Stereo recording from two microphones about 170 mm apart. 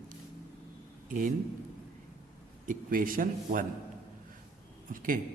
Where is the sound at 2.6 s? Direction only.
55° right (ahead or behind).